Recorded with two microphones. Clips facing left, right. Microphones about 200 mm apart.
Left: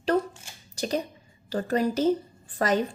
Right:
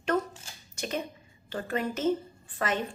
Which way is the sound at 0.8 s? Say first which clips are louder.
Left 5 dB; 35° left (ahead or behind).